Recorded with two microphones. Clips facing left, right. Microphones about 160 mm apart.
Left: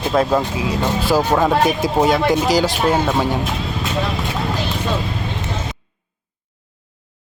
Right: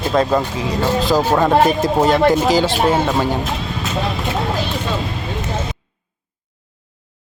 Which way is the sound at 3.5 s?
Centre (ahead or behind).